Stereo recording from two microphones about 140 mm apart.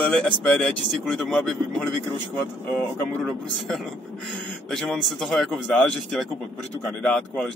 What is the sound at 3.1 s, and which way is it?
Speech, centre (ahead or behind).